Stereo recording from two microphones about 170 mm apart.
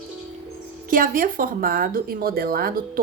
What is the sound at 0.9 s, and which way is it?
A woman's voice, 55° right (ahead or behind).